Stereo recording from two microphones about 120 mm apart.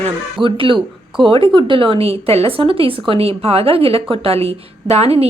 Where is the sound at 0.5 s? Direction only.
45° right (ahead or behind).